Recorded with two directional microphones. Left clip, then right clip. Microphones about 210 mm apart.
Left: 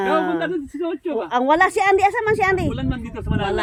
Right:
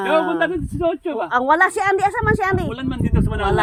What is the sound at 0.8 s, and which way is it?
Speech, 15° right (ahead or behind).